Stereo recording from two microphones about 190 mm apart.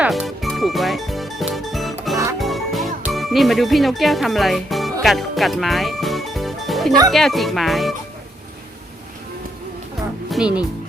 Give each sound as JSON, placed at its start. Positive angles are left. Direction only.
{"t": 0.0, "sound": "music", "side_deg": 0}
{"t": 7.1, "sound": "speech", "side_deg": 0}
{"t": 10.2, "sound": "music", "side_deg": -5}